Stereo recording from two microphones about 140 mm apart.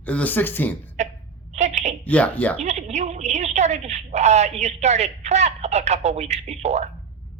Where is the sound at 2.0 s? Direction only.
10° left (ahead or behind).